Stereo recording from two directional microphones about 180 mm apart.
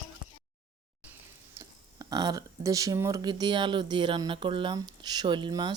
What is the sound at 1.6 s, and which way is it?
Speech, 20° right (ahead or behind).